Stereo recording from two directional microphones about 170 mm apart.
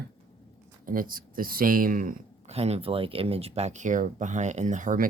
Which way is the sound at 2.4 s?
40° right (ahead or behind).